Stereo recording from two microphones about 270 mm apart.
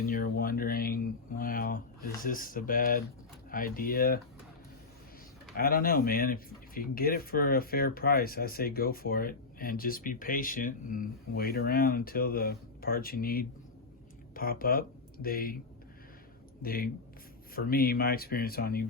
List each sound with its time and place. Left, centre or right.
0.0 s a sound: left
2.2 s speech: left
5.5 s speech: left
16.6 s speech: left